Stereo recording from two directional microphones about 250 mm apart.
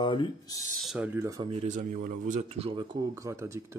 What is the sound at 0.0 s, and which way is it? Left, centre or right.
Speech, centre.